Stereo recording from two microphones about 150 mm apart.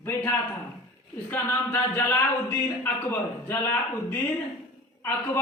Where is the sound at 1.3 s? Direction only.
15° left (ahead or behind).